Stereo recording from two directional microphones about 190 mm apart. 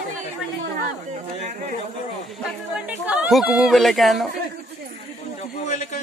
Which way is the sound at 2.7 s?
5° right (ahead or behind).